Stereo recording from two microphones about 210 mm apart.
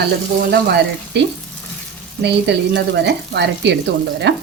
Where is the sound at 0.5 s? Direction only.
50° right (ahead or behind).